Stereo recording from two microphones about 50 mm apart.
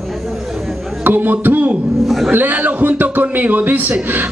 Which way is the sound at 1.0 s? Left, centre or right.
Right.